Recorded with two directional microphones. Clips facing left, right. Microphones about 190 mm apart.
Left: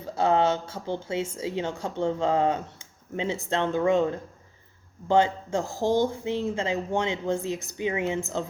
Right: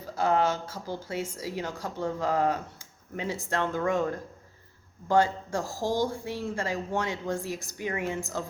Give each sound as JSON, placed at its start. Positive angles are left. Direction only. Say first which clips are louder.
{"t": 0.0, "sound": "a woman's voice", "louder": "left 3 dB", "side_deg": 25}